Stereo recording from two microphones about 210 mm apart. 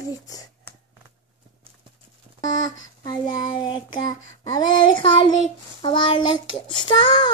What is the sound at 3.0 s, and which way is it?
Child singing, 20° left (ahead or behind).